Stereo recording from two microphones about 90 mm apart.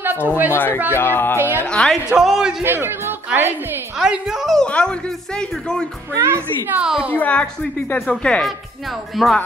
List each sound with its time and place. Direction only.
0.0 s speech: 20° right (ahead or behind)
0.5 s speech: 25° left (ahead or behind)
1.7 s speech: 5° left (ahead or behind)
2.0 s a woman's voice: 5° right (ahead or behind)
2.6 s speech: 25° right (ahead or behind)
4.0 s a woman's voice: 5° right (ahead or behind)
4.6 s speech: 10° left (ahead or behind)
6.2 s speech: 25° right (ahead or behind)
6.8 s a woman's voice: 10° right (ahead or behind)
7.1 s a woman's voice: 15° left (ahead or behind); by 9.4 s centre (ahead or behind)